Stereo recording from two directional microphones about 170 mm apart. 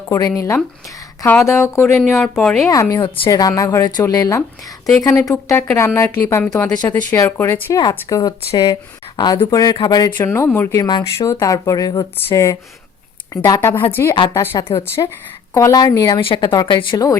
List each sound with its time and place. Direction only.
0.1 s a woman's voice: 20° left (ahead or behind); by 2.6 s 5° left (ahead or behind)
2.6 s speech: 20° left (ahead or behind)